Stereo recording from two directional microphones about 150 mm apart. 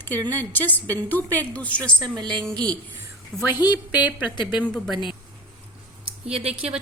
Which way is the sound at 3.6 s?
25° left (ahead or behind).